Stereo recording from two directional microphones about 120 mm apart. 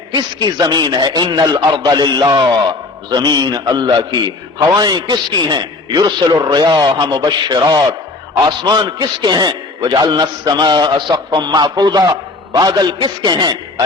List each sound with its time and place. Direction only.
0.1 s a man's voice: 35° right (ahead or behind)